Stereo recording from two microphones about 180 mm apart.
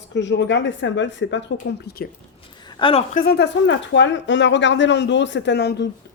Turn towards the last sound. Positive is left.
turn(degrees=70)  # may be behind; listen again after turning